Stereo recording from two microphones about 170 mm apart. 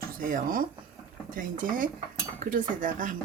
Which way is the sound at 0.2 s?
55° right (ahead or behind).